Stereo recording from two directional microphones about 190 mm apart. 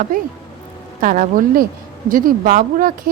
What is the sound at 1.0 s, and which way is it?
Speech, 45° right (ahead or behind).